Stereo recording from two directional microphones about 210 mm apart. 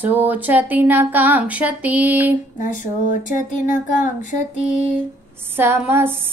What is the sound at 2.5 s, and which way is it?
Child singing, 40° left (ahead or behind).